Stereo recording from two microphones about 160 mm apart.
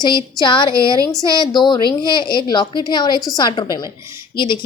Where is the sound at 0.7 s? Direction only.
20° right (ahead or behind).